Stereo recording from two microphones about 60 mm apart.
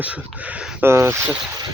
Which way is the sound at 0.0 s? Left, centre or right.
Right.